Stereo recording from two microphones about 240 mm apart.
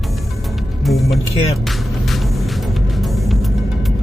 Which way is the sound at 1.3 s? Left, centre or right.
Left.